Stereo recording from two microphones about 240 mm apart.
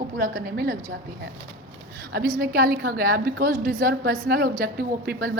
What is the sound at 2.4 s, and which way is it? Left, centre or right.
A woman's voice, right.